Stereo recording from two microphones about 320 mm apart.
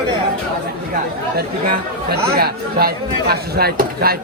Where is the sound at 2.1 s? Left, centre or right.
Right.